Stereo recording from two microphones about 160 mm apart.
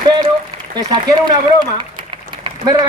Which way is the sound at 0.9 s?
25° right (ahead or behind).